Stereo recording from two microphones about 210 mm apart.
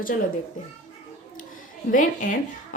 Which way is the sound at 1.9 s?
40° left (ahead or behind).